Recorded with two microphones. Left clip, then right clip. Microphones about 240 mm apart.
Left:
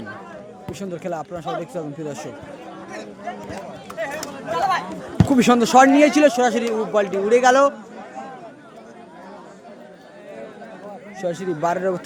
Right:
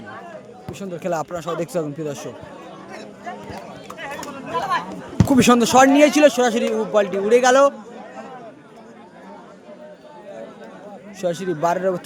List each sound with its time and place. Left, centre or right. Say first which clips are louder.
1.1 s speech: right 4 dB; centre
2.0 s speech: right 2 dB; centre
4.2 s a sound: left 2 dB; left
5.1 s a man's voice: right 1 dB; centre
11.2 s speech: right 2 dB; centre